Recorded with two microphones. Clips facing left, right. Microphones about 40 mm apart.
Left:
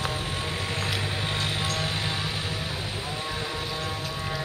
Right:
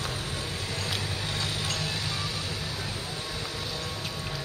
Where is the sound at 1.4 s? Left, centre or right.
Left.